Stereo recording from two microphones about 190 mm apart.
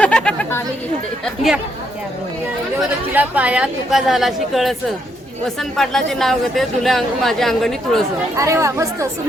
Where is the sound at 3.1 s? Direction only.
10° right (ahead or behind).